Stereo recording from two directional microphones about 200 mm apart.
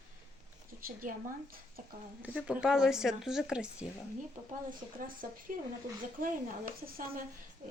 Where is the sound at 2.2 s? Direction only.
5° right (ahead or behind).